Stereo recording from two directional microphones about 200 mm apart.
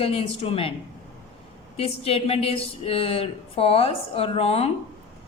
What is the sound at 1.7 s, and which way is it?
A woman's voice, 30° left (ahead or behind).